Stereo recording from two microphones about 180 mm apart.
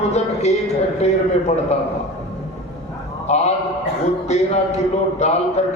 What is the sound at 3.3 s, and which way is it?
A man's voice, 40° left (ahead or behind).